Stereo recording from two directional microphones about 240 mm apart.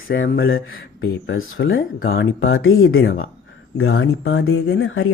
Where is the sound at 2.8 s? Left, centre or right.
Left.